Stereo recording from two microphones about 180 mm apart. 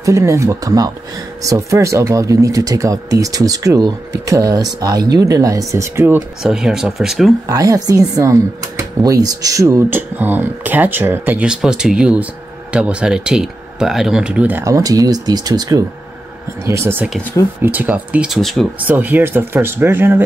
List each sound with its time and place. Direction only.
0.0 s speech: 15° right (ahead or behind)
6.4 s speech: 5° right (ahead or behind)
7.4 s speech: 20° right (ahead or behind); by 18.7 s centre (ahead or behind)
18.8 s speech: 10° right (ahead or behind)